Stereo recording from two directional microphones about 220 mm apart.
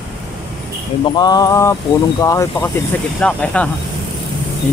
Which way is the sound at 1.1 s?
20° left (ahead or behind).